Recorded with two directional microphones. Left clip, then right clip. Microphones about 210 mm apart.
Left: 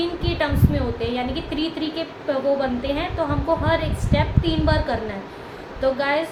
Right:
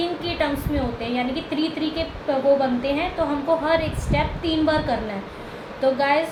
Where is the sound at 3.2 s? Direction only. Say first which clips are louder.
Even; 15° left (ahead or behind).